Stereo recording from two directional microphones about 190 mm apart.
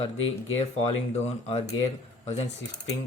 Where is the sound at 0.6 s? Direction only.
35° left (ahead or behind).